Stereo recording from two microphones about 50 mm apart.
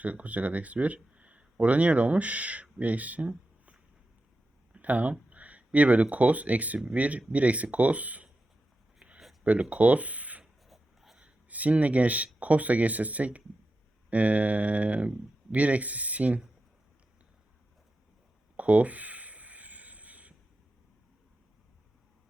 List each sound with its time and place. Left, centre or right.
0.0 s speech: right
4.7 s a sound: right
5.3 s speech: right
9.4 s speech: right
10.7 s writing: centre
11.4 s speech: right
18.5 s a sound: right